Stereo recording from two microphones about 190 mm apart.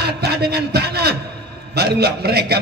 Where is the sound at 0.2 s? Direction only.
55° right (ahead or behind).